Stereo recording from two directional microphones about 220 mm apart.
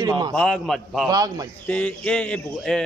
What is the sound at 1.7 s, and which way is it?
Speech, 5° left (ahead or behind).